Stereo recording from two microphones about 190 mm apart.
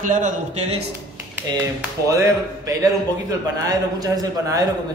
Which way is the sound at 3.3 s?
20° right (ahead or behind).